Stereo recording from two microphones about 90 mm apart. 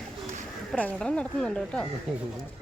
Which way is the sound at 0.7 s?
20° left (ahead or behind).